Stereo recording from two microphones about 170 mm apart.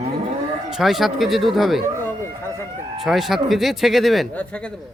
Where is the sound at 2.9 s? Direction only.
Centre (ahead or behind).